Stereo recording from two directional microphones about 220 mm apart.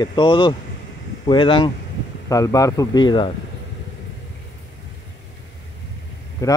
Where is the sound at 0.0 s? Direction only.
20° left (ahead or behind).